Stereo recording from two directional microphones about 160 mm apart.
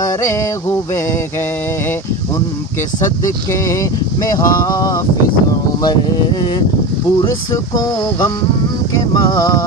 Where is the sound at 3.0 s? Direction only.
20° left (ahead or behind).